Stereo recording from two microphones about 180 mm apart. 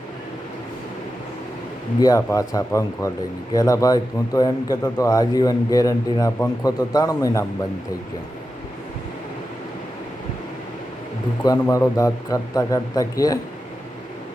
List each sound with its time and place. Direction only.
2.0 s a man's voice: 20° left (ahead or behind)
11.4 s a man's voice: 15° left (ahead or behind)